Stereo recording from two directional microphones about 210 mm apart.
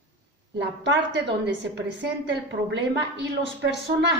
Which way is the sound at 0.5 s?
55° right (ahead or behind).